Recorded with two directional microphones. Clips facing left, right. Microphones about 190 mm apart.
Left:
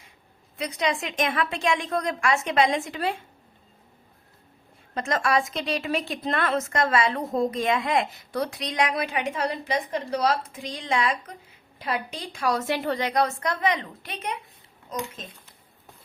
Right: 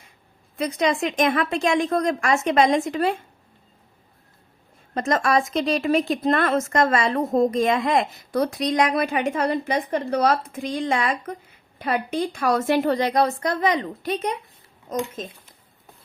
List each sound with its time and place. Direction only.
0.6 s a woman's voice: 45° right (ahead or behind)
4.9 s a woman's voice: 45° right (ahead or behind)